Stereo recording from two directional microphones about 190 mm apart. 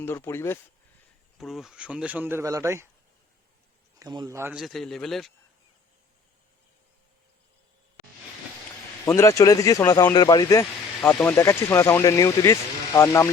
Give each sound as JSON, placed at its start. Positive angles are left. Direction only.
{"t": 0.0, "sound": "speech", "side_deg": 10}
{"t": 1.4, "sound": "speech", "side_deg": 0}
{"t": 4.0, "sound": "speech", "side_deg": -20}
{"t": 4.5, "sound": "speech", "side_deg": 0}
{"t": 9.0, "sound": "speech", "side_deg": 15}